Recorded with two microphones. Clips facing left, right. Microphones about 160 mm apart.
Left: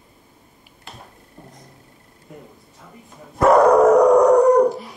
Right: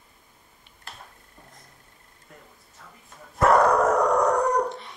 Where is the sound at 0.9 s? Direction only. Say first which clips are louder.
Left 4 dB; centre (ahead or behind).